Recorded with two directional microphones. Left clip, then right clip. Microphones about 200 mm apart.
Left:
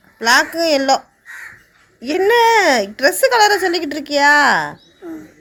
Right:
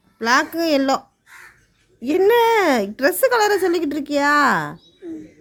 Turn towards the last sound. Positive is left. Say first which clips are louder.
# left 5 dB
turn(degrees=-55)  # may be behind; listen again after turning